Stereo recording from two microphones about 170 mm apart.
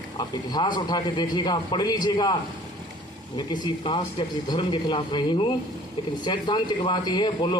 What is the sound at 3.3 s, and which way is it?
A man's voice, 25° left (ahead or behind).